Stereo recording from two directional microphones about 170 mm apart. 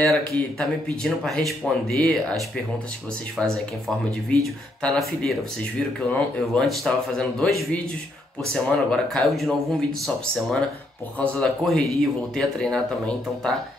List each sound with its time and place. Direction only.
0.0 s speech: 5° left (ahead or behind)